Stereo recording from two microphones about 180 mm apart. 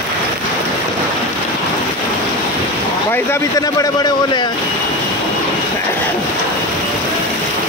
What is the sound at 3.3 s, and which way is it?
A man's voice, 20° left (ahead or behind).